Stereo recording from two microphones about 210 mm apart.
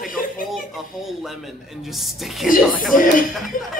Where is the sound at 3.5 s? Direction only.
40° left (ahead or behind).